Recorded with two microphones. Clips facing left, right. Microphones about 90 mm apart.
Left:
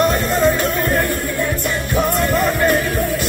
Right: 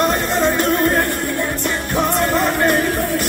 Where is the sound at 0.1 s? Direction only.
25° right (ahead or behind).